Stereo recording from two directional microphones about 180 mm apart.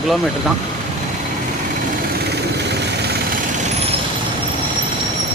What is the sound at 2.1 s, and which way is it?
Vehicle, 65° right (ahead or behind).